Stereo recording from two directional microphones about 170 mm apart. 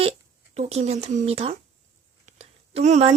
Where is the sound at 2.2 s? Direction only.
40° right (ahead or behind).